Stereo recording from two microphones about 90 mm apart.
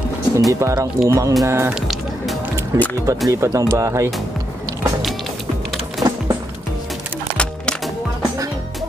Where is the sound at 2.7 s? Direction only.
35° right (ahead or behind).